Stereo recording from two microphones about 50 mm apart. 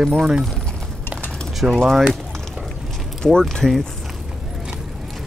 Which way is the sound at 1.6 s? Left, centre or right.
Centre.